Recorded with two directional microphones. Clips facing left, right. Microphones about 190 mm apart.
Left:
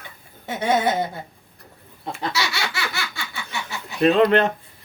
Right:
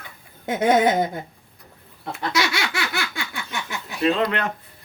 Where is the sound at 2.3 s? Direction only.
55° right (ahead or behind).